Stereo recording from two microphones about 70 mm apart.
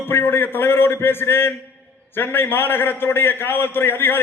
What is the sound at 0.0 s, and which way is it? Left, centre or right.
A man's voice, left.